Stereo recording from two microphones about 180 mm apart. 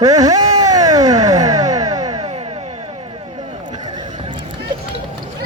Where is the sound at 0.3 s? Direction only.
20° right (ahead or behind).